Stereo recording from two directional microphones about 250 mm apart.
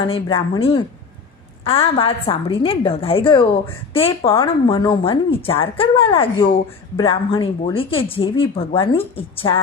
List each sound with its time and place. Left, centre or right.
0.1 s speech: left